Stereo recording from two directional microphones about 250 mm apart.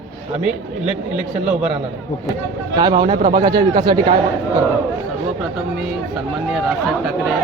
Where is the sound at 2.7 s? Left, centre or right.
Centre.